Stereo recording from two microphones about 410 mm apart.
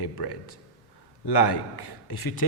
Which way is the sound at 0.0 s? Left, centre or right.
Left.